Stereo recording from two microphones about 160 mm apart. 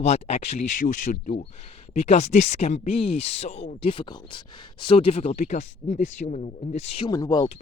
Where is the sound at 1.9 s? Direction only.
45° left (ahead or behind).